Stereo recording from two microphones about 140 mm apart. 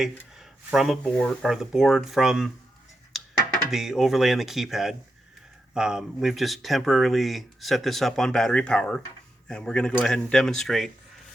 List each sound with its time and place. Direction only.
0.3 s speech: 5° right (ahead or behind)
3.7 s speech: 5° right (ahead or behind)